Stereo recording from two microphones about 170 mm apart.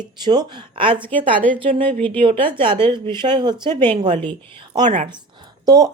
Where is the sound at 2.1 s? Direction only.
30° right (ahead or behind).